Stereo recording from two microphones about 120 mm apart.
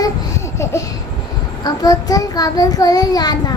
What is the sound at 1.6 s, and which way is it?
Child singing, 30° left (ahead or behind).